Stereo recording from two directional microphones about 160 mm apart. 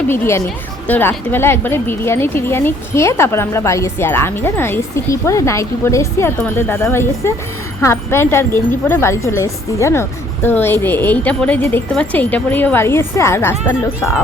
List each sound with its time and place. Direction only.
0.1 s a woman's voice: 15° left (ahead or behind)